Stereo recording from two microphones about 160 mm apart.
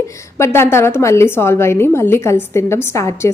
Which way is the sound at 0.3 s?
15° left (ahead or behind).